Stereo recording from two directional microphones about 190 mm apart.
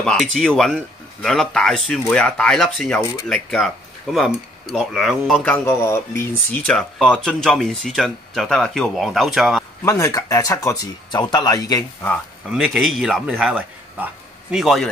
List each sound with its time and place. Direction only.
0.0 s speech: 5° left (ahead or behind)
9.8 s speech: 15° left (ahead or behind)
12.4 s speech: centre (ahead or behind)